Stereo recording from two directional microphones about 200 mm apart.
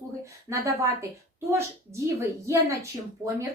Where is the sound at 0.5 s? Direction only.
15° right (ahead or behind).